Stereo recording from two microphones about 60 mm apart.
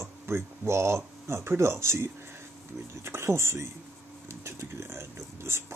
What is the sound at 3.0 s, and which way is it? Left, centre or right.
Speech, right.